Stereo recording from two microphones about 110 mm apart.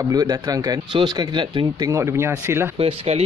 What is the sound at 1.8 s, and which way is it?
Speech, 30° right (ahead or behind).